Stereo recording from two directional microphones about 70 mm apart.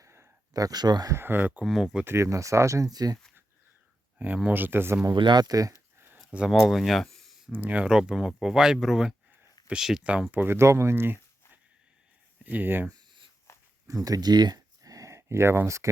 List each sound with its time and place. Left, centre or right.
0.0 s a sound: right
0.5 s speech: right
1.1 s speech: right
1.6 s speech: centre
2.0 s speech: right
2.9 s speech: right
4.4 s speech: right
5.3 s speech: right
6.5 s speech: centre
7.5 s speech: right
7.9 s speech: centre
10.3 s speech: right
13.8 s speech: right